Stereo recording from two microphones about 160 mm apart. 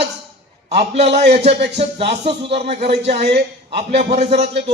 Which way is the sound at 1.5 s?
90° right.